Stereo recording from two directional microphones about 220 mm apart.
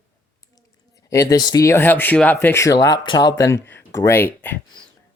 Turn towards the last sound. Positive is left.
turn(degrees=10)  # may be behind; listen again after turning